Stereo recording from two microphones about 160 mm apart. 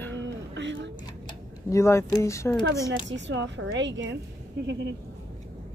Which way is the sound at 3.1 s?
90° right.